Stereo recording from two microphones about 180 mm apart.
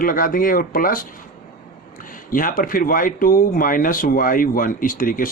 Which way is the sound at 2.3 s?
50° left (ahead or behind).